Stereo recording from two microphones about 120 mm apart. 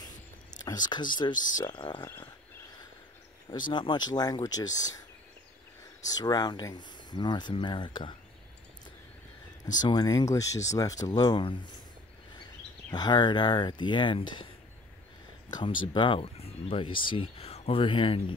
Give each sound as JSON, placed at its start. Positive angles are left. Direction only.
{"t": 0.7, "sound": "speech", "side_deg": 35}
{"t": 3.4, "sound": "speech", "side_deg": 40}
{"t": 6.0, "sound": "speech", "side_deg": 30}
{"t": 9.8, "sound": "speech", "side_deg": 35}
{"t": 12.9, "sound": "speech", "side_deg": 40}
{"t": 15.5, "sound": "speech", "side_deg": 40}
{"t": 16.7, "sound": "speech", "side_deg": 45}